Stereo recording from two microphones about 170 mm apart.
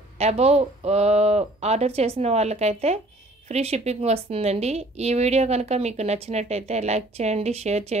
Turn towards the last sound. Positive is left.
turn(degrees=-40)  # may be behind; listen again after turning